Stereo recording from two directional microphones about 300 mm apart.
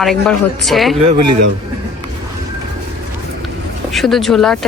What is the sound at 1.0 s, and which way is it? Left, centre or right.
Speech, right.